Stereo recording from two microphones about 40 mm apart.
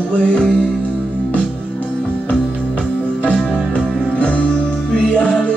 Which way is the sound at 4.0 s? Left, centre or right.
Left.